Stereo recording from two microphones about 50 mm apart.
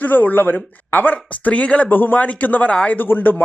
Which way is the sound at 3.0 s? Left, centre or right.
Left.